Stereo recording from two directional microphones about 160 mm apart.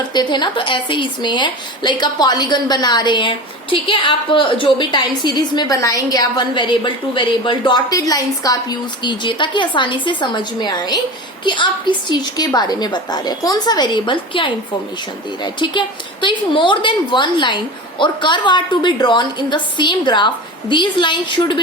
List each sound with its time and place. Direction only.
0.1 s a woman's voice: 30° left (ahead or behind)